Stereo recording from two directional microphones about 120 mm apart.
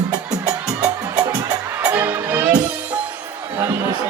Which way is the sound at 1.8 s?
15° right (ahead or behind).